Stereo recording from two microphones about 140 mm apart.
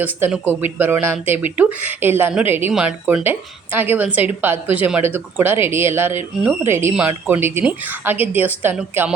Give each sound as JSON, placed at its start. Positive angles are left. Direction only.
{"t": 0.0, "sound": "a woman's voice", "side_deg": -15}